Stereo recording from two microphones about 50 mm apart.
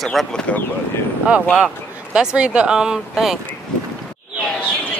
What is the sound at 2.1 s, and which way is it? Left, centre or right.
Speech, centre.